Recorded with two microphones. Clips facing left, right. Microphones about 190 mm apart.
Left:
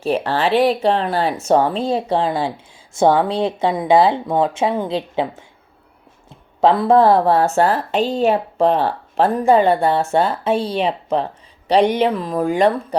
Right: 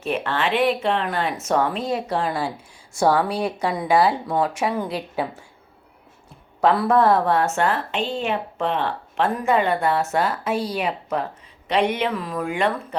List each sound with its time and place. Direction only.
0.0 s a woman's voice: 35° left (ahead or behind)
6.6 s a woman's voice: 25° left (ahead or behind)